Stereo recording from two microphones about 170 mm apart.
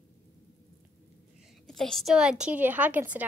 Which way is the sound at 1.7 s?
Centre (ahead or behind).